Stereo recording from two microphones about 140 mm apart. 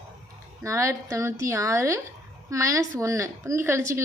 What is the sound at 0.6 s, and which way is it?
A woman's voice, 20° right (ahead or behind).